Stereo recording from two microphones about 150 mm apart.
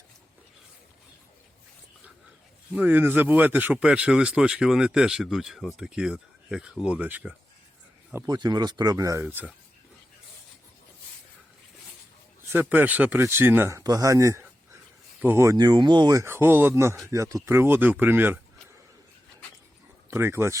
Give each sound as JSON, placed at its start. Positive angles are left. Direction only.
{"t": 2.7, "sound": "speech", "side_deg": -10}
{"t": 8.1, "sound": "speech", "side_deg": -25}
{"t": 9.2, "sound": "speech", "side_deg": -10}
{"t": 12.5, "sound": "speech", "side_deg": -10}
{"t": 20.1, "sound": "speech", "side_deg": -15}